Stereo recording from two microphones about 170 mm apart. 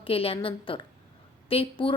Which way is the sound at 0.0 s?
35° left (ahead or behind).